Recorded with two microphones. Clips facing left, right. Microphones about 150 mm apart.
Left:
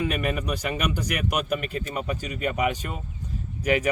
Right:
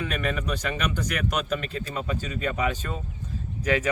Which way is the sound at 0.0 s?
10° left (ahead or behind).